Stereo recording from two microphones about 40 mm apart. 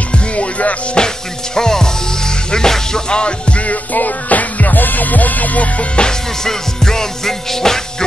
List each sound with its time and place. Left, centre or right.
0.1 s music: left
0.9 s speech: centre; by 5.9 s left
5.9 s music: centre